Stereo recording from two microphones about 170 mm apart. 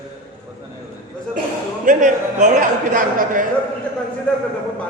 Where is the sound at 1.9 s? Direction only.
50° right (ahead or behind).